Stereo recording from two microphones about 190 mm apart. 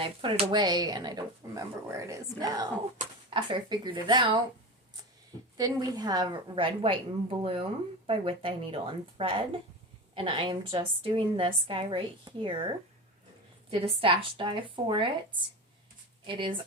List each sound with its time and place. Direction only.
0.0 s speech: 25° right (ahead or behind)
5.5 s speech: 20° right (ahead or behind)